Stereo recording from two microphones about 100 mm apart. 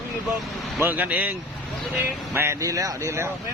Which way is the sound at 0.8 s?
15° right (ahead or behind).